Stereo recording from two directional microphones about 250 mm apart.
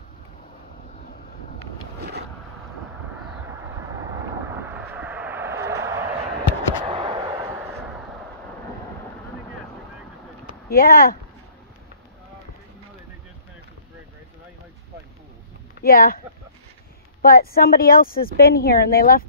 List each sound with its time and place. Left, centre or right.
3.2 s vehicle: centre
6.8 s a sound: centre
10.7 s speech: left
15.8 s speech: left
17.2 s speech: left